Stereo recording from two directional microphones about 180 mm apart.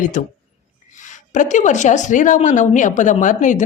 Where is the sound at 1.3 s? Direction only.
45° left (ahead or behind).